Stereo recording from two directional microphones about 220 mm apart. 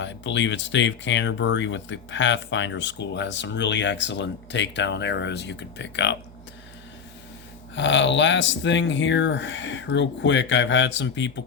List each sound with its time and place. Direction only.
0.0 s speech: 55° left (ahead or behind)
7.8 s speech: 55° left (ahead or behind)